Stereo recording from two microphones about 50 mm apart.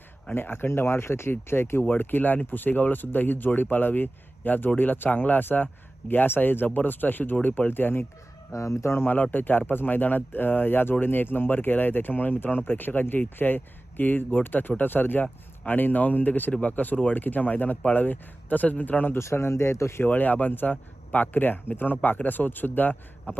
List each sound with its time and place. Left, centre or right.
0.3 s speech: left
8.5 s speech: left
9.3 s speech: left
19.1 s speech: left
20.0 s speech: left